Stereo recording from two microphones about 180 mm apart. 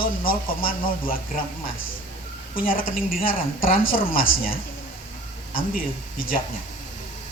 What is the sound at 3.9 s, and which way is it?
Speech, 50° left (ahead or behind).